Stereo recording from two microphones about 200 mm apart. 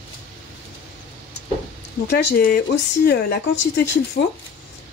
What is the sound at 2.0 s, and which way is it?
Speech, 60° left (ahead or behind).